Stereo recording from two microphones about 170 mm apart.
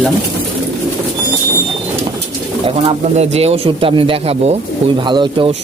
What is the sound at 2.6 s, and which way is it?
Speech, 35° right (ahead or behind).